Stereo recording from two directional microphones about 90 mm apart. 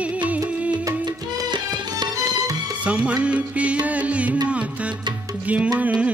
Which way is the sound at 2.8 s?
15° right (ahead or behind).